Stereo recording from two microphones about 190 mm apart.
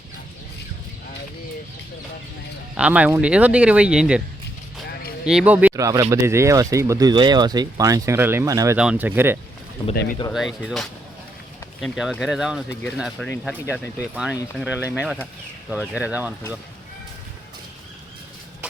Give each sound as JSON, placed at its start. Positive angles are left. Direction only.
{"t": 2.7, "sound": "speech", "side_deg": -5}
{"t": 5.2, "sound": "speech", "side_deg": -5}
{"t": 9.9, "sound": "speech", "side_deg": 55}
{"t": 10.3, "sound": "speech", "side_deg": 0}